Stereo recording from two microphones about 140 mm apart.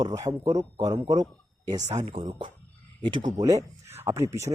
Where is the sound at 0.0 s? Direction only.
25° right (ahead or behind).